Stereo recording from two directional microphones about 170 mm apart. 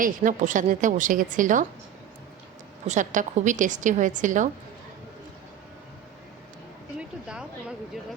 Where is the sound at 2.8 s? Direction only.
45° right (ahead or behind).